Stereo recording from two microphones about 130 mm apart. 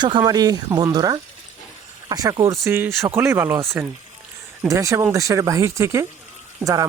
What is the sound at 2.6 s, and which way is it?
Speech, 20° right (ahead or behind).